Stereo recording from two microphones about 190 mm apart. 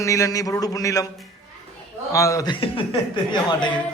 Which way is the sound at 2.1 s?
15° left (ahead or behind).